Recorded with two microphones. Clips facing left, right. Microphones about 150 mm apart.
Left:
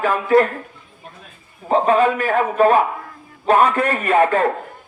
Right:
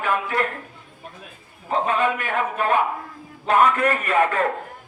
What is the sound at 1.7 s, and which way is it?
A man's voice, 35° left (ahead or behind).